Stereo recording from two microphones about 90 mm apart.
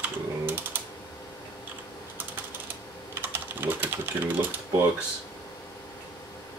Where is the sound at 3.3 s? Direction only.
20° right (ahead or behind).